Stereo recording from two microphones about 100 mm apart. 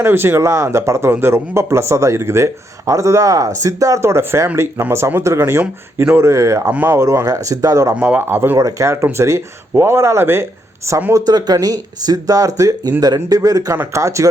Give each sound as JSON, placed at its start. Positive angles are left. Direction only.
{"t": 0.0, "sound": "speech", "side_deg": -25}
{"t": 7.0, "sound": "speech", "side_deg": -30}
{"t": 7.9, "sound": "speech", "side_deg": -15}
{"t": 8.5, "sound": "speech", "side_deg": -35}
{"t": 11.1, "sound": "speech", "side_deg": -40}